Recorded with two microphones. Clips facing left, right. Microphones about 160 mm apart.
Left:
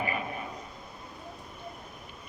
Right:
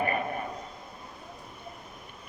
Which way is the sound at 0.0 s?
50° right (ahead or behind).